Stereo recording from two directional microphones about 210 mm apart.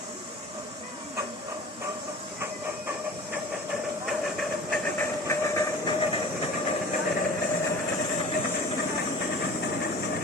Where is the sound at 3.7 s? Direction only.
Centre (ahead or behind).